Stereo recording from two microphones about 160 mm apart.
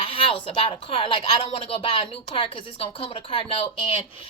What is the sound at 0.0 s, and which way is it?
Speech, 35° left (ahead or behind).